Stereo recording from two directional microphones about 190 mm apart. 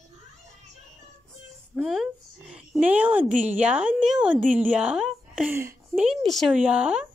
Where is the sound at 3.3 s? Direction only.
40° right (ahead or behind).